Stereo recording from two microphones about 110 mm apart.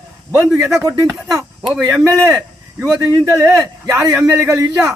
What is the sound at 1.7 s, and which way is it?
Speech, centre (ahead or behind).